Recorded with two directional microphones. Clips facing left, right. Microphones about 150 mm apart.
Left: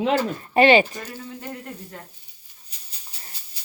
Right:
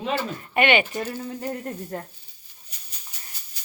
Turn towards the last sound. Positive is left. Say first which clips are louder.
# left 1 dB
turn(degrees=30)  # may be behind; listen again after turning